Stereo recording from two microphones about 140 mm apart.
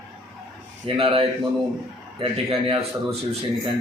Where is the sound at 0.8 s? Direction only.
40° right (ahead or behind).